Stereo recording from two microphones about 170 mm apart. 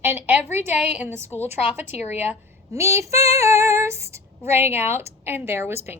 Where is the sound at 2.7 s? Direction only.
15° right (ahead or behind).